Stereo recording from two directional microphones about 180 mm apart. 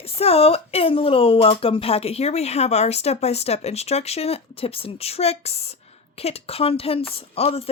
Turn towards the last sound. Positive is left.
turn(degrees=35)  # may be behind; listen again after turning